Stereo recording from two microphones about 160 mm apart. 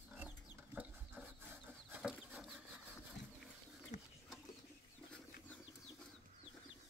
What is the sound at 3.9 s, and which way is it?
Bird, 45° left (ahead or behind).